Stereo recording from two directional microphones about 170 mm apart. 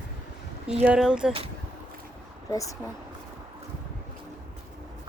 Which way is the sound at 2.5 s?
20° left (ahead or behind).